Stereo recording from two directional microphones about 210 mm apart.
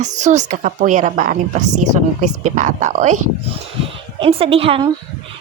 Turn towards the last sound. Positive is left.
turn(degrees=-25)  # may be behind; listen again after turning